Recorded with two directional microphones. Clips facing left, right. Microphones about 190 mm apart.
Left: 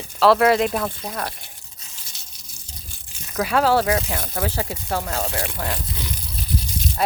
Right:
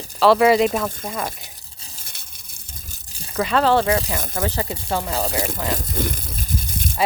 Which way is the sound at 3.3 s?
5° left (ahead or behind).